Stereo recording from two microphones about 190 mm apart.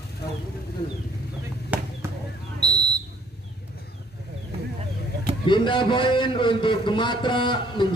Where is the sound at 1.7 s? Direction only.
10° right (ahead or behind).